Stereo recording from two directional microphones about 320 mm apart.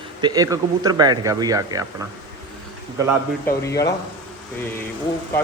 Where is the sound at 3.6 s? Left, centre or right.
Centre.